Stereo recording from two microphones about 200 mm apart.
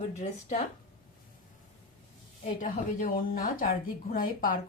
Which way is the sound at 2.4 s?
40° left (ahead or behind).